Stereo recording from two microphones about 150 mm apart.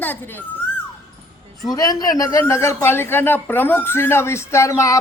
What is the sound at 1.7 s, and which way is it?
A man's voice, 25° left (ahead or behind).